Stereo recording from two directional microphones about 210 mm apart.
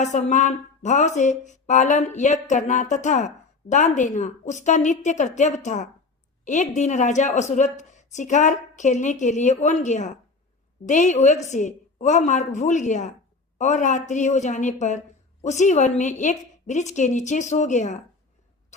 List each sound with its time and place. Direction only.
0.0 s speech: 35° left (ahead or behind)
18.7 s cough: 35° left (ahead or behind)